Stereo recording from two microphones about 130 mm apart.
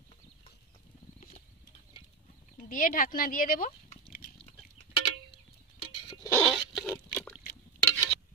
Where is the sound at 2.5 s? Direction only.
90° left.